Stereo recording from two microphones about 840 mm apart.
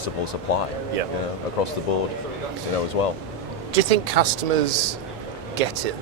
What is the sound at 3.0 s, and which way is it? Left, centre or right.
Speech, left.